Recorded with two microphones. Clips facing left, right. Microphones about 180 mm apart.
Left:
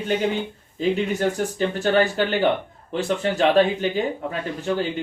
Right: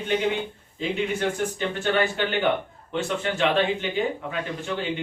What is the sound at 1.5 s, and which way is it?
Speech, 40° left (ahead or behind).